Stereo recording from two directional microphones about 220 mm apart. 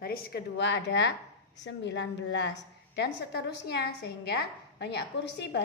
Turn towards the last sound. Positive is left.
turn(degrees=50)  # may be behind; listen again after turning